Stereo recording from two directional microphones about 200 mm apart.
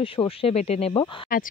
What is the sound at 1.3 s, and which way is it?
Speech, 45° left (ahead or behind).